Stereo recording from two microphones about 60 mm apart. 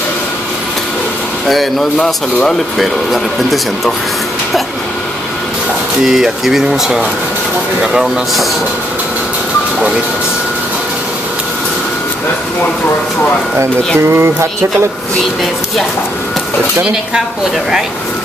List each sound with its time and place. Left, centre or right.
1.5 s speech: centre
2.8 s speech: centre
6.0 s speech: centre
14.0 s speech: right
16.8 s speech: centre